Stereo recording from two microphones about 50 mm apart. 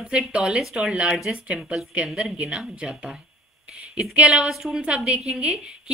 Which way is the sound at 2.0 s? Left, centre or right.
Centre.